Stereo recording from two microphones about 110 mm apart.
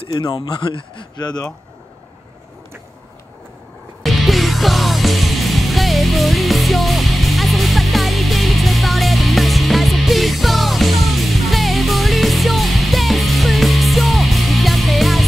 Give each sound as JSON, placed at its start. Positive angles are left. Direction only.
{"t": 0.1, "sound": "speech", "side_deg": 40}
{"t": 4.0, "sound": "music", "side_deg": 0}